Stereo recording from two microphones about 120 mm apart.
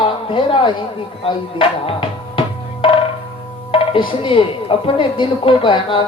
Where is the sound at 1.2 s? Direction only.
50° left (ahead or behind).